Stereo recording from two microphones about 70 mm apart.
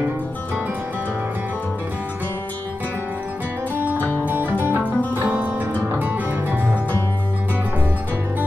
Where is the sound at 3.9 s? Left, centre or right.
Left.